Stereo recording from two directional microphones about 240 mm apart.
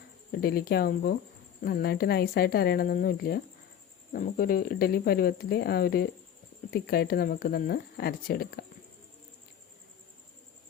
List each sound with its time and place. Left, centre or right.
0.3 s speech: left